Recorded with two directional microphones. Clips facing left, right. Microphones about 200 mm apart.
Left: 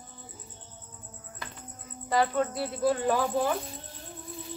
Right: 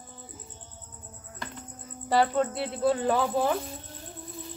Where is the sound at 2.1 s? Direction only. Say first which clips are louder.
Right 2 dB; 25° right (ahead or behind).